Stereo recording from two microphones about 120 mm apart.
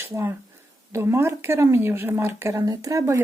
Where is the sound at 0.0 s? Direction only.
20° right (ahead or behind).